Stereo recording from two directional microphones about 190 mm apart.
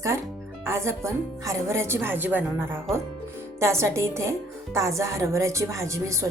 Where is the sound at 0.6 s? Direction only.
15° right (ahead or behind).